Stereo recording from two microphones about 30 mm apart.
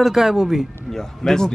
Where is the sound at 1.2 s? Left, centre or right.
Left.